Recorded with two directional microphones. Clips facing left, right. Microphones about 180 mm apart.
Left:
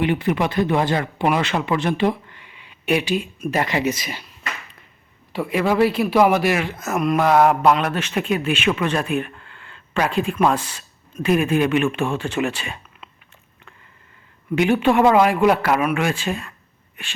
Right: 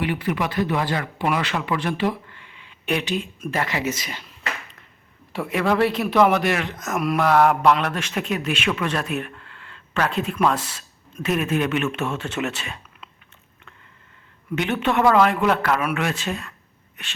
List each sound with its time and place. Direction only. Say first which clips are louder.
0.0 s a man's voice: left 4 dB; 25° left (ahead or behind)
5.3 s a man's voice: left 2 dB; centre (ahead or behind)
12.0 s speech: left 4 dB; 30° left (ahead or behind)
12.4 s speech: left 4 dB; 10° left (ahead or behind)
14.5 s a man's voice: left 5 dB; 10° left (ahead or behind)